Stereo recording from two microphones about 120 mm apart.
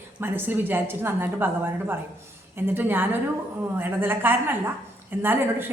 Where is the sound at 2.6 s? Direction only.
15° right (ahead or behind).